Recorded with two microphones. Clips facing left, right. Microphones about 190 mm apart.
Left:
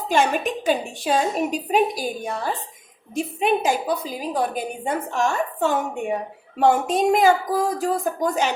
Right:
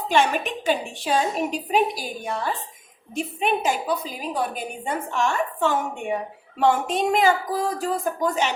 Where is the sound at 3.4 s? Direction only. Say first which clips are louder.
Left 3 dB; 40° left (ahead or behind).